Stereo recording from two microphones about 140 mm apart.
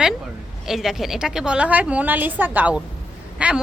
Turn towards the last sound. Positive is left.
turn(degrees=-10)  # may be behind; listen again after turning